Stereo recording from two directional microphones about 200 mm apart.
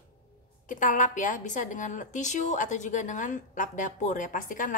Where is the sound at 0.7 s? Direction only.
40° left (ahead or behind).